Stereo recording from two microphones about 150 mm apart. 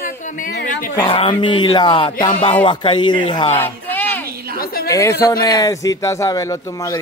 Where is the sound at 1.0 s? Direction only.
35° left (ahead or behind).